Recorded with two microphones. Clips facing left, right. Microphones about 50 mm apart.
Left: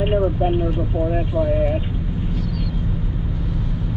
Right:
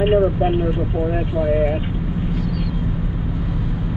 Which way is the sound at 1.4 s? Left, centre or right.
Right.